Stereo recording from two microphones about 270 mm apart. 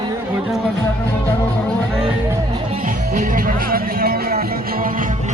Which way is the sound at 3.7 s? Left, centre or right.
Right.